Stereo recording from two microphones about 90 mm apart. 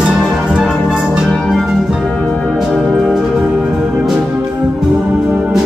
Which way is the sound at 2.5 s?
5° left (ahead or behind).